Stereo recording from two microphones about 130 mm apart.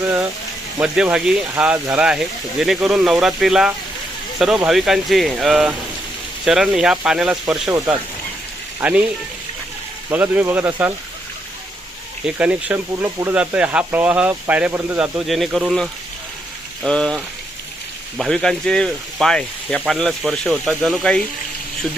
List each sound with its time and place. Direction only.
0.0 s a sound: 10° right (ahead or behind)
0.8 s speech: 5° right (ahead or behind)
8.8 s speech: 10° right (ahead or behind)
10.1 s speech: 15° right (ahead or behind)
12.2 s speech: 10° right (ahead or behind)
12.9 s speech: 20° right (ahead or behind)
16.8 s speech: 5° left (ahead or behind)
18.2 s speech: 5° left (ahead or behind)